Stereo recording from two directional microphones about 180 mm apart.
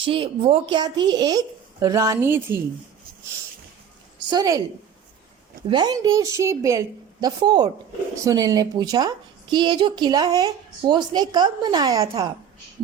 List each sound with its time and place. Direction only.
0.0 s speech: 30° right (ahead or behind); by 2.6 s 15° right (ahead or behind)
4.3 s speech: 20° right (ahead or behind)
5.6 s speech: 25° right (ahead or behind)